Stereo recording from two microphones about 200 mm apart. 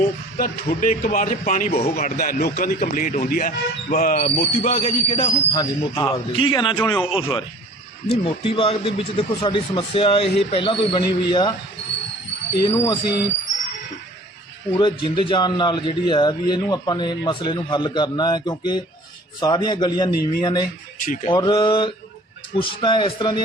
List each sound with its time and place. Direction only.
0.0 s a man's voice: 45° left (ahead or behind); by 11.5 s 20° left (ahead or behind)
12.6 s a man's voice: 20° left (ahead or behind)
14.8 s a man's voice: 25° left (ahead or behind)